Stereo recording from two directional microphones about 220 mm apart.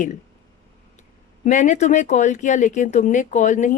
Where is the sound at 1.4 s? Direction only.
35° left (ahead or behind).